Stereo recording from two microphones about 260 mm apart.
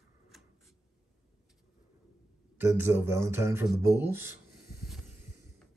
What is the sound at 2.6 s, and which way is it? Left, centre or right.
Speech, centre.